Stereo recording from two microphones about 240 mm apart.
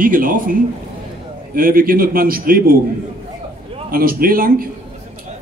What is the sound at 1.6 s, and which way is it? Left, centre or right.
Speech, right.